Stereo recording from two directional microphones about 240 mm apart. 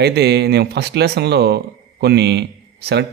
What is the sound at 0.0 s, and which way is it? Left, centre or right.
Speech, right.